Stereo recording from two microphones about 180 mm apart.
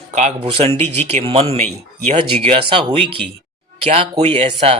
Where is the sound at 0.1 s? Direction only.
40° right (ahead or behind).